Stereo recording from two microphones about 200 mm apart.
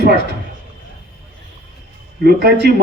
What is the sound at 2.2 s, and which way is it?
Speech, 50° right (ahead or behind).